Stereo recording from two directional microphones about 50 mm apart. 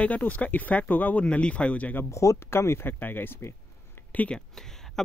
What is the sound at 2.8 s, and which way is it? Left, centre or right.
Speech, left.